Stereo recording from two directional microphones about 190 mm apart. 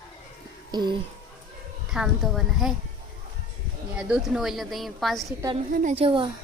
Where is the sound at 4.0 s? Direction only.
5° right (ahead or behind).